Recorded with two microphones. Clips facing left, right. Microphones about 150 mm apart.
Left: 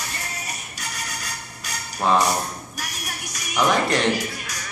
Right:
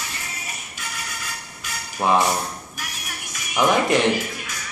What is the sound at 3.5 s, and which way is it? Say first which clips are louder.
Speech: right 2 dB; 15° right (ahead or behind).